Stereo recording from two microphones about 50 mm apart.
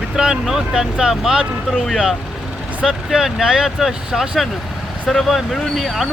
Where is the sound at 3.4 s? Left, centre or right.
Centre.